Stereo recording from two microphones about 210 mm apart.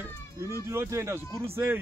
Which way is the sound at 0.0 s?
10° right (ahead or behind).